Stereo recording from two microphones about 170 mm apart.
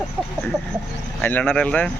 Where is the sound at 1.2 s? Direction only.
10° left (ahead or behind).